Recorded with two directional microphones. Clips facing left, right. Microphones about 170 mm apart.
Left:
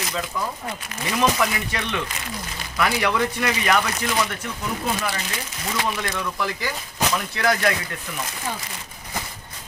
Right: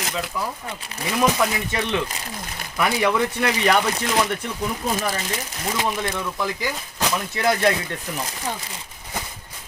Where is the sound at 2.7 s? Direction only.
15° right (ahead or behind).